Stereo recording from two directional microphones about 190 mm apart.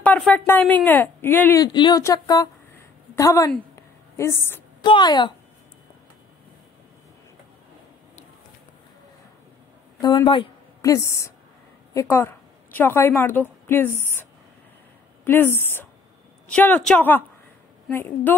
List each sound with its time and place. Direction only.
0.0 s speech: 10° left (ahead or behind)
3.5 s a sound: 15° left (ahead or behind)
4.8 s a woman's voice: 25° left (ahead or behind)
10.0 s a woman's voice: 25° left (ahead or behind)
15.2 s speech: 10° left (ahead or behind)